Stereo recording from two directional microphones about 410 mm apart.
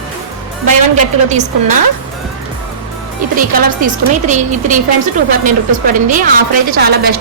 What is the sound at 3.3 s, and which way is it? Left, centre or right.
Speech, centre.